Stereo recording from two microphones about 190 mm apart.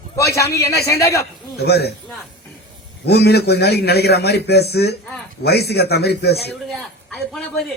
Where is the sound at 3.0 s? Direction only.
60° left (ahead or behind).